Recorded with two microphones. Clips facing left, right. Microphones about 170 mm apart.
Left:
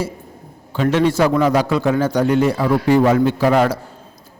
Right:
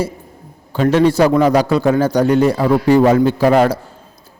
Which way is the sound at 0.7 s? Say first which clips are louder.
Right 3 dB; 40° right (ahead or behind).